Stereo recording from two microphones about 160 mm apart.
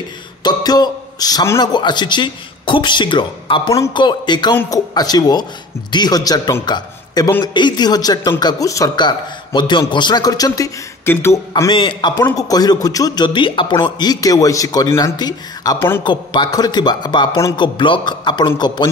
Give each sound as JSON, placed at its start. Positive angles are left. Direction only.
{"t": 0.4, "sound": "a man's voice", "side_deg": 25}
{"t": 11.7, "sound": "a man's voice", "side_deg": 30}
{"t": 12.2, "sound": "speech", "side_deg": 20}